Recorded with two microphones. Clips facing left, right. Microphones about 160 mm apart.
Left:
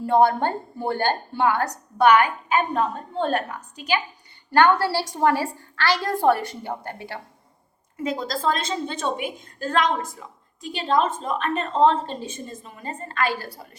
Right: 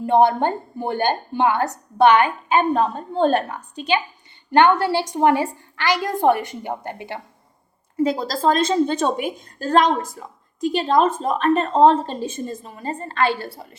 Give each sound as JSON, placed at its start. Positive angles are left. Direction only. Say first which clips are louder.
{"t": 0.0, "sound": "a woman's voice", "louder": "right 2 dB", "side_deg": -20}
{"t": 7.9, "sound": "a woman's voice", "louder": "right 6 dB", "side_deg": -35}